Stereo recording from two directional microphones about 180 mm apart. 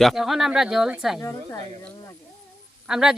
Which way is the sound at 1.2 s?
15° left (ahead or behind).